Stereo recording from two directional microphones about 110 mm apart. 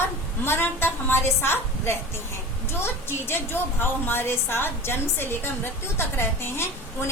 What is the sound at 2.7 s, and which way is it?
A woman's voice, 20° left (ahead or behind).